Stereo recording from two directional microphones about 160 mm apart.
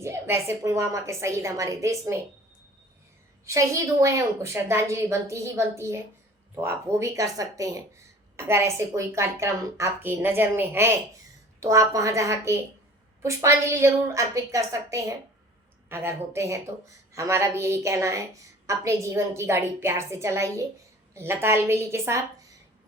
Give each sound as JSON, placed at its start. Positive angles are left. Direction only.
{"t": 0.0, "sound": "a woman's voice", "side_deg": -15}
{"t": 3.4, "sound": "a woman's voice", "side_deg": -20}